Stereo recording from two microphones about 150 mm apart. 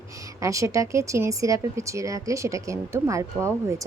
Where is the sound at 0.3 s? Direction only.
20° right (ahead or behind).